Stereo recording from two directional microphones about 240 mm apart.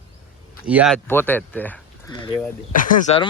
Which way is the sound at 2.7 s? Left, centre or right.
Left.